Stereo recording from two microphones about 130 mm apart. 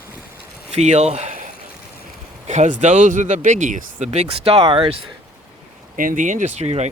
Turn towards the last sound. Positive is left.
turn(degrees=-55)  # may be behind; listen again after turning